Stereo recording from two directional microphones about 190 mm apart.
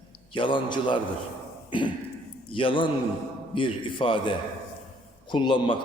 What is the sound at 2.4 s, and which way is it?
A man's voice, 25° left (ahead or behind).